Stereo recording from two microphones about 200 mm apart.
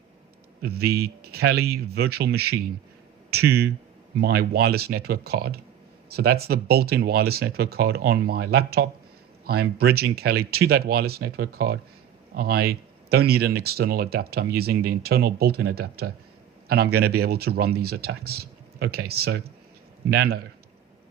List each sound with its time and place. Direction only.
0.6 s speech: 50° right (ahead or behind)